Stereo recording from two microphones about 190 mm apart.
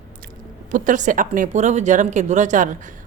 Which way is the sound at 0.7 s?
40° right (ahead or behind).